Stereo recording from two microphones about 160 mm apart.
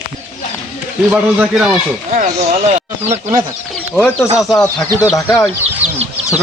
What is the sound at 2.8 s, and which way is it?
Speech, 40° right (ahead or behind).